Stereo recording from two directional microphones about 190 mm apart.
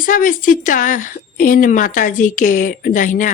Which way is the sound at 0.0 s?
45° left (ahead or behind).